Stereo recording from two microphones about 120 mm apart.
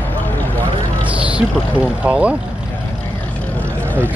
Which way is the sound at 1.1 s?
10° right (ahead or behind).